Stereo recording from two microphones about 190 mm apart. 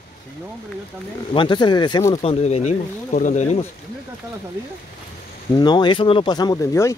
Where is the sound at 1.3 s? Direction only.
25° left (ahead or behind).